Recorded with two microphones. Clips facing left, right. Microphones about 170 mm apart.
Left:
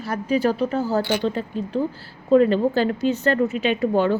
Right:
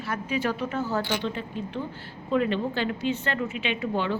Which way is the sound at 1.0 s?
65° left (ahead or behind).